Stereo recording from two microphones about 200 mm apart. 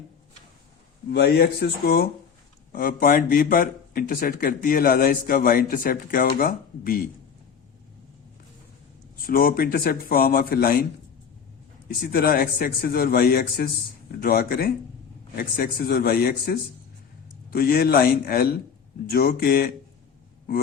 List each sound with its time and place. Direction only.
1.1 s a man's voice: 55° left (ahead or behind)
9.2 s a man's voice: 50° left (ahead or behind)
11.9 s a man's voice: 50° left (ahead or behind)